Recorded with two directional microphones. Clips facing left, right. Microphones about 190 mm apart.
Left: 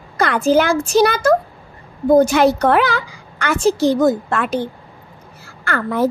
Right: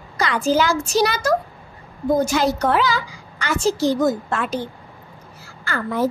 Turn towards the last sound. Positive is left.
turn(degrees=60)  # may be behind; listen again after turning